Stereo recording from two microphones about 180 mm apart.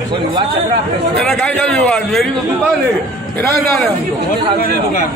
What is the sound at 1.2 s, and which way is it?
A man's voice, 5° left (ahead or behind).